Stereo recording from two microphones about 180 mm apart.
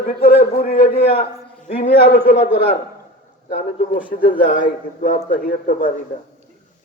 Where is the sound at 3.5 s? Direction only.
45° left (ahead or behind).